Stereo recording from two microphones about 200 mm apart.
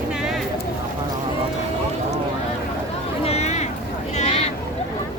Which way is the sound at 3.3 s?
35° left (ahead or behind).